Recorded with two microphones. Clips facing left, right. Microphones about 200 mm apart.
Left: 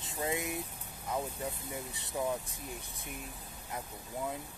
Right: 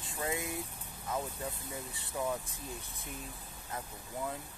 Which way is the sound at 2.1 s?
15° left (ahead or behind).